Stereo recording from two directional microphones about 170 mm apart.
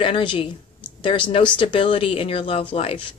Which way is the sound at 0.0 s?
30° left (ahead or behind).